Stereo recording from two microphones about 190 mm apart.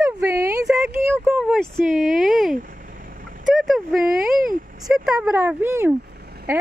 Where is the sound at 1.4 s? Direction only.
Centre (ahead or behind).